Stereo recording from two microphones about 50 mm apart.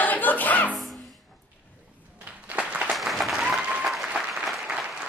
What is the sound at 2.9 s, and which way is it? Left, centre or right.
Applause, centre.